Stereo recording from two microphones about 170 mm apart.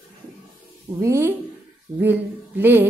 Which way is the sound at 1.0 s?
15° right (ahead or behind).